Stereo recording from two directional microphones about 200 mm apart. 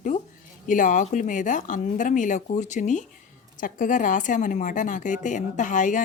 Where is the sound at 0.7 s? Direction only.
40° left (ahead or behind).